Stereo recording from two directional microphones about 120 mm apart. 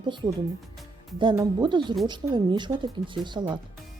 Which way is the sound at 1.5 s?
40° right (ahead or behind).